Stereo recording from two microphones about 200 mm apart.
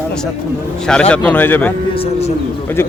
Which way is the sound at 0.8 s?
5° left (ahead or behind).